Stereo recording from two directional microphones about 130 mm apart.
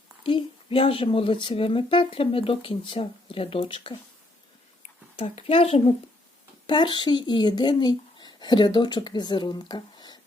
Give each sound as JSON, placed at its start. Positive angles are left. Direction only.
{"t": 0.2, "sound": "speech", "side_deg": 40}
{"t": 5.1, "sound": "speech", "side_deg": 50}
{"t": 6.7, "sound": "speech", "side_deg": 35}